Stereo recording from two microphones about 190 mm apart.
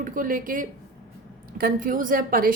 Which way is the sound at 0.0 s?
45° right (ahead or behind).